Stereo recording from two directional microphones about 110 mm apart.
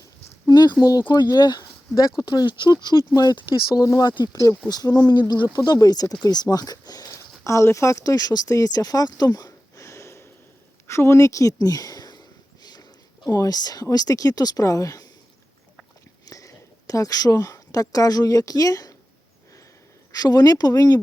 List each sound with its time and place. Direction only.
0.4 s a sound: 40° left (ahead or behind)
0.8 s speech: 35° left (ahead or behind)
13.2 s speech: 30° left (ahead or behind)
16.2 s speech: 30° left (ahead or behind)
20.1 s speech: 35° left (ahead or behind)